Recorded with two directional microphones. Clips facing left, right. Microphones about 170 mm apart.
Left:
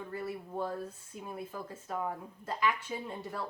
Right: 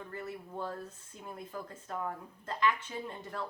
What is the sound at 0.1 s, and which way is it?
Speech, 10° left (ahead or behind).